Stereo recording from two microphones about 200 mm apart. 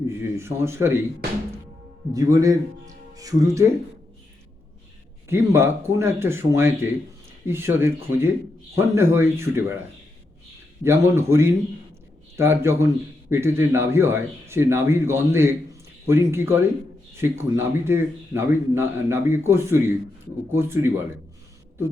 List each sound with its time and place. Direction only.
0.2 s a man's voice: 15° right (ahead or behind)
2.1 s a man's voice: 15° right (ahead or behind)
5.3 s a man's voice: 15° right (ahead or behind)
10.8 s a man's voice: 15° right (ahead or behind)